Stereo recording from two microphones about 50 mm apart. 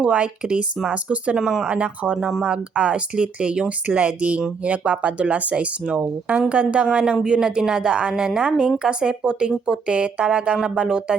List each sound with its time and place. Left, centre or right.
0.0 s speech: right
1.4 s a woman's voice: centre
1.6 s speech: right
2.1 s speech: centre
2.4 s a woman's voice: right